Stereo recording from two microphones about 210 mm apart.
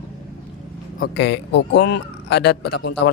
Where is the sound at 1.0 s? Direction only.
55° left (ahead or behind).